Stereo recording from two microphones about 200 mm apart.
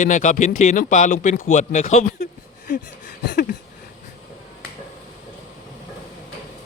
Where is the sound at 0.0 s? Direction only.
40° left (ahead or behind).